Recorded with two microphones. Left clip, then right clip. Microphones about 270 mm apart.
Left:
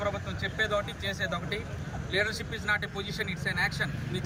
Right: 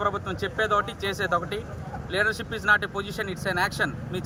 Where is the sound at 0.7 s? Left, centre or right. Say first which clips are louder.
Right 5 dB; right.